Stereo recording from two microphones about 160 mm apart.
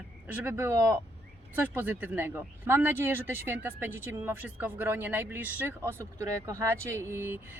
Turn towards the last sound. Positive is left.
turn(degrees=-15)  # may be behind; listen again after turning